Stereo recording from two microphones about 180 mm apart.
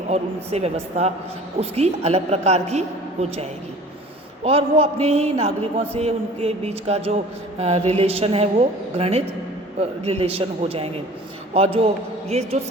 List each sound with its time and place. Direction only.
0.1 s a woman's voice: 35° right (ahead or behind)
4.4 s a woman's voice: 35° right (ahead or behind)